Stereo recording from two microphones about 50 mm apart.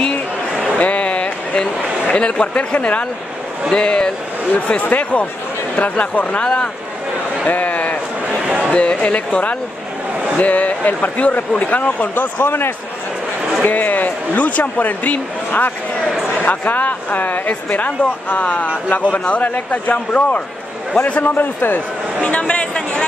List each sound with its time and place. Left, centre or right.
0.7 s a sound: left
2.4 s speech: left
4.6 s speech: left
7.4 s a sound: left
8.7 s speech: left
12.4 s a man's voice: left
13.7 s speech: left
21.0 s speech: left
22.2 s speech: left